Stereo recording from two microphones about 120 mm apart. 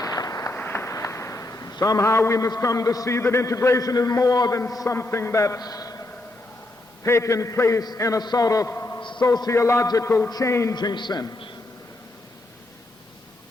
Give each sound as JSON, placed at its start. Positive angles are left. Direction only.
{"t": 0.0, "sound": "a sound", "side_deg": 30}
{"t": 0.5, "sound": "a man's voice", "side_deg": 20}
{"t": 7.0, "sound": "a man's voice", "side_deg": 25}
{"t": 9.0, "sound": "a sound", "side_deg": 40}
{"t": 9.2, "sound": "a man's voice", "side_deg": 30}
{"t": 10.8, "sound": "a man's voice", "side_deg": 40}